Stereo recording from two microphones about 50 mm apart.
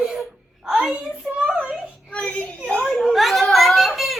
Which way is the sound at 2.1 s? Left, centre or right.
Left.